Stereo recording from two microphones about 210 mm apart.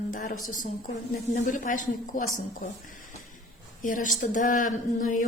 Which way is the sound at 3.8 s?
40° left (ahead or behind).